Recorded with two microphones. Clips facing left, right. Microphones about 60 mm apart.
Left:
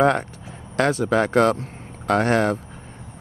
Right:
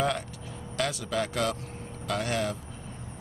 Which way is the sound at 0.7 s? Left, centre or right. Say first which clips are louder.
Left 10 dB; left.